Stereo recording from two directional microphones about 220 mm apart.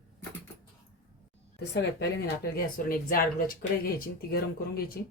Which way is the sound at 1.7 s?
50° left (ahead or behind).